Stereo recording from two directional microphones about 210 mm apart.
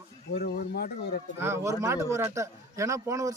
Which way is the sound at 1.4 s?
10° right (ahead or behind).